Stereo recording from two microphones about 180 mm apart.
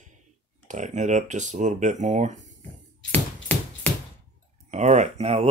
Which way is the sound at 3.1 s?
10° left (ahead or behind).